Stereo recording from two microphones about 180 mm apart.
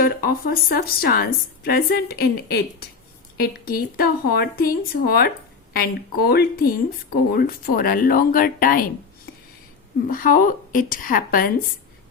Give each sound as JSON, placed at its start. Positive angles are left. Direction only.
{"t": 0.0, "sound": "a woman's voice", "side_deg": 55}
{"t": 10.1, "sound": "speech", "side_deg": 50}